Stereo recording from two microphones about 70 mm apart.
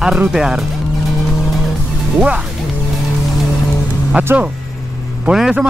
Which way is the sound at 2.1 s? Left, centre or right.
Centre.